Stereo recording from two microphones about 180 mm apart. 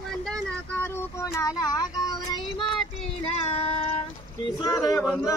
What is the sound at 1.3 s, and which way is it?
Speech, 20° left (ahead or behind).